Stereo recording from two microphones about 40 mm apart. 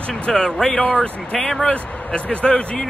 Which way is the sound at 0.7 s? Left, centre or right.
Left.